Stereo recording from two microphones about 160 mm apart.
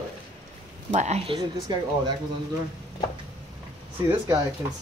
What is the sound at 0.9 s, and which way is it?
Speech, 45° right (ahead or behind).